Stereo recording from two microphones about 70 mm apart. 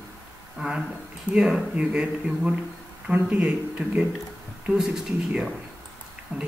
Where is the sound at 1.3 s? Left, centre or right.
Centre.